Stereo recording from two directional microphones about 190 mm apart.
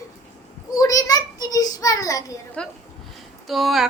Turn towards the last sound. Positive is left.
turn(degrees=0)  # may be behind; listen again after turning